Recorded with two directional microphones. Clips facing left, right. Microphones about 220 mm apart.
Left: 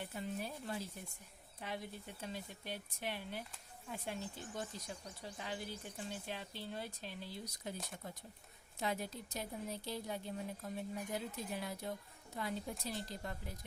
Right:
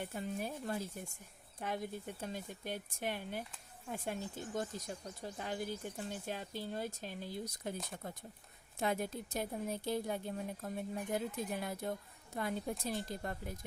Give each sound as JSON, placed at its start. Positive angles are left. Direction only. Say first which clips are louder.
{"t": 0.1, "sound": "a woman's voice", "louder": "right 3 dB", "side_deg": -50}